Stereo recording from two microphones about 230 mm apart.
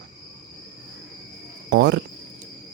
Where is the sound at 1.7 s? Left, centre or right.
Right.